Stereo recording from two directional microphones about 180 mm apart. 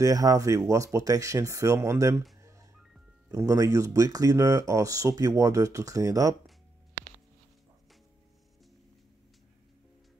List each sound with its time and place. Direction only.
0.0 s speech: 20° right (ahead or behind)
3.3 s speech: 15° right (ahead or behind)